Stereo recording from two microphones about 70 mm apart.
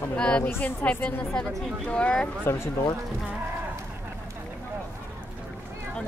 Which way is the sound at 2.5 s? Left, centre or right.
Left.